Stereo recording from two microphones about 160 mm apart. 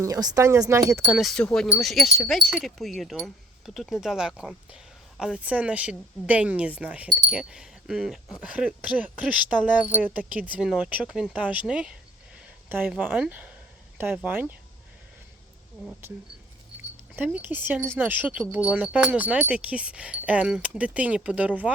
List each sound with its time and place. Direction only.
0.0 s speech: 25° right (ahead or behind)
1.0 s speech: centre (ahead or behind)
17.2 s speech: 10° right (ahead or behind)